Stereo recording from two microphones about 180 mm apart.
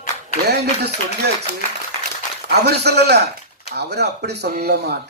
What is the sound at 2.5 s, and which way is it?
Speech, 65° right (ahead or behind).